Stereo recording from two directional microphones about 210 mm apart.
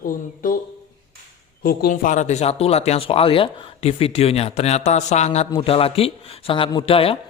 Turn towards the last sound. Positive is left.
turn(degrees=25)  # may be behind; listen again after turning